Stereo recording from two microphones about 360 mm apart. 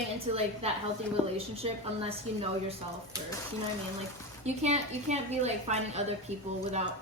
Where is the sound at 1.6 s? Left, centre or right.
Centre.